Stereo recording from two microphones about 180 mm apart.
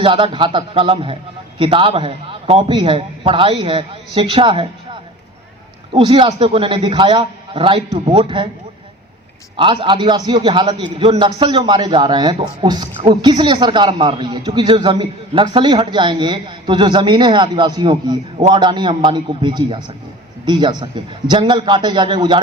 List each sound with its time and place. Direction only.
0.0 s a man's voice: 30° right (ahead or behind)
9.6 s a man's voice: 30° right (ahead or behind)